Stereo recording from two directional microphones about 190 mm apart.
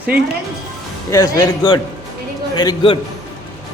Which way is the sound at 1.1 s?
15° left (ahead or behind).